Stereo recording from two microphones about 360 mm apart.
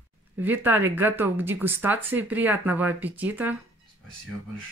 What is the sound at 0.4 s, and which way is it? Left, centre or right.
Speech, centre.